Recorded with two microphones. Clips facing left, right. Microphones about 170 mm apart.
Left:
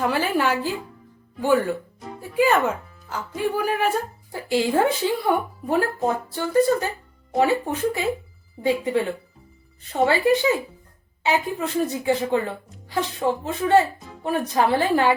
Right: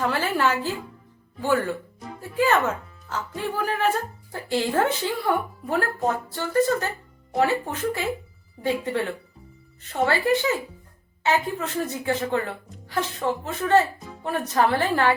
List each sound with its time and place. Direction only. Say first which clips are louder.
0.0 s a woman's voice: left 2 dB; 15° left (ahead or behind)